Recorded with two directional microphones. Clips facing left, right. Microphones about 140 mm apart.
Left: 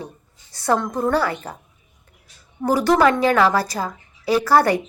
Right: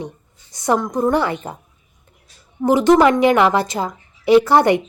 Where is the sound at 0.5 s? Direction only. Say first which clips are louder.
Right 2 dB; 20° right (ahead or behind).